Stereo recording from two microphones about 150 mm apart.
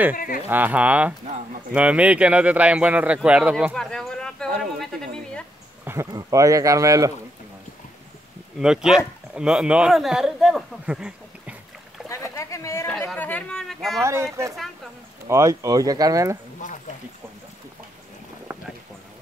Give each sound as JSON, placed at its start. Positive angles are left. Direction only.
{"t": 0.1, "sound": "speech", "side_deg": 70}
{"t": 0.5, "sound": "a man's voice", "side_deg": -10}
{"t": 3.7, "sound": "a sound", "side_deg": 5}
{"t": 5.9, "sound": "speech", "side_deg": -20}
{"t": 8.5, "sound": "a man's voice", "side_deg": -5}
{"t": 12.1, "sound": "a sound", "side_deg": 20}
{"t": 13.1, "sound": "speech", "side_deg": 10}
{"t": 14.0, "sound": "speech", "side_deg": -20}
{"t": 18.5, "sound": "boat", "side_deg": -10}